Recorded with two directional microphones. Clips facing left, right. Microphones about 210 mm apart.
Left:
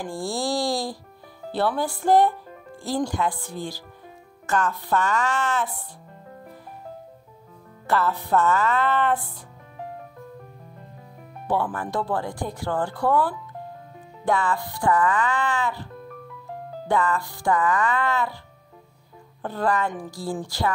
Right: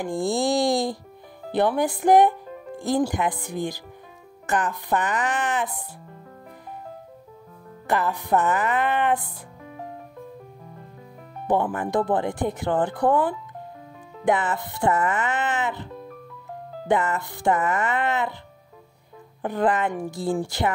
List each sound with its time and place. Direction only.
0.0 s speech: 20° right (ahead or behind)
7.8 s speech: 15° right (ahead or behind)
11.4 s speech: 20° right (ahead or behind)
19.4 s speech: 20° right (ahead or behind)